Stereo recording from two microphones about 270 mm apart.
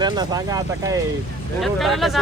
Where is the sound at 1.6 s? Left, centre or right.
Centre.